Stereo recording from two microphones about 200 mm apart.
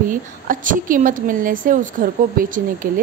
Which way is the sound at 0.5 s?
40° right (ahead or behind).